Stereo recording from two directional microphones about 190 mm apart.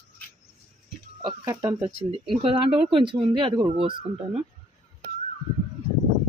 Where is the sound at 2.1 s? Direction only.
25° right (ahead or behind).